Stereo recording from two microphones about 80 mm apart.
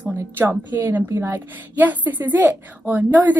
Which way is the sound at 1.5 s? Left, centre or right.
Right.